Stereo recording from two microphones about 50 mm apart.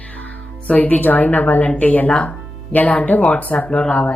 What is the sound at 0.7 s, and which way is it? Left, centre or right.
A woman's voice, left.